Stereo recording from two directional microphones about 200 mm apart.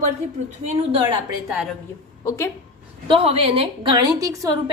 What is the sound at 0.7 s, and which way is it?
Speech, 30° right (ahead or behind).